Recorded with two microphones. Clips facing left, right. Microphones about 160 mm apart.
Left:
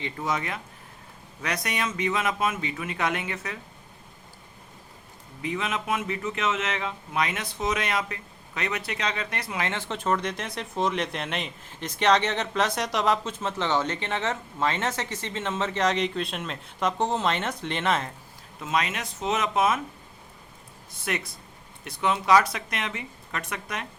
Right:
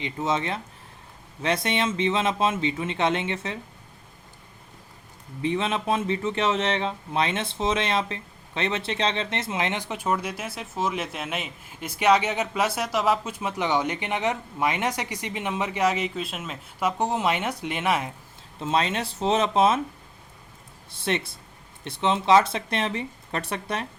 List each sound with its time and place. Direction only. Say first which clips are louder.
0.0 s speech: right 3 dB; 25° right (ahead or behind)
5.4 s speech: right 4 dB; 30° right (ahead or behind); by 18.1 s 10° right (ahead or behind)
18.6 s speech: right 3 dB; 30° right (ahead or behind)
20.9 s speech: right 4 dB; 30° right (ahead or behind)